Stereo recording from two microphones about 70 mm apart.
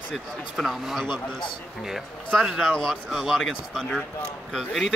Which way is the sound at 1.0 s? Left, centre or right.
Left.